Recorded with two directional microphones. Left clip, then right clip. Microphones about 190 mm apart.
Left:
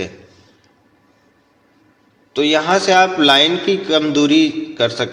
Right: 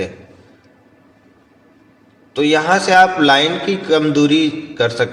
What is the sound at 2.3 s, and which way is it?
A man's voice, 25° left (ahead or behind).